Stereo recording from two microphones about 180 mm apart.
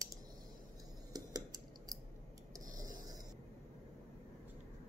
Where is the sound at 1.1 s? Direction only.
20° right (ahead or behind).